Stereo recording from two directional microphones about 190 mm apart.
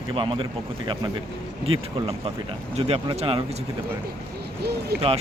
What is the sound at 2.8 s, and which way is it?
Speech, 30° right (ahead or behind).